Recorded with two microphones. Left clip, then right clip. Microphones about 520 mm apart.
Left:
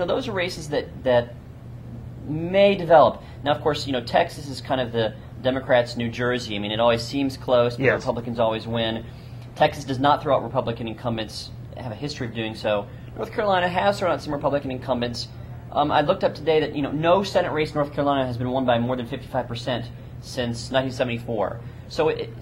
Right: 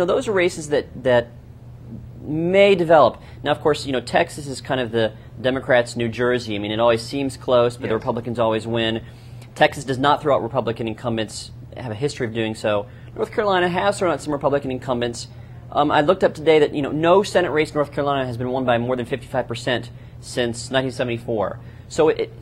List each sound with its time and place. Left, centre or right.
0.0 s speech: right
2.3 s speech: right